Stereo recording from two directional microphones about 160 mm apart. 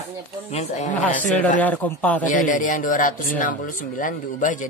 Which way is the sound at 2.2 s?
55° left (ahead or behind).